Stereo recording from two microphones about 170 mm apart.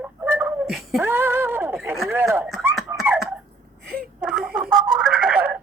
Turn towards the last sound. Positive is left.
turn(degrees=-5)  # may be behind; listen again after turning